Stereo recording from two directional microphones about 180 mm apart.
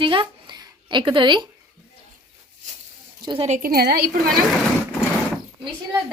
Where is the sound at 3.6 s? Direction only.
60° right (ahead or behind).